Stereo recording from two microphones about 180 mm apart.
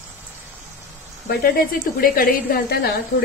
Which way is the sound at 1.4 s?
55° left (ahead or behind).